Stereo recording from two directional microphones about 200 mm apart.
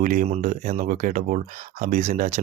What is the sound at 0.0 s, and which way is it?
Speech, 40° right (ahead or behind).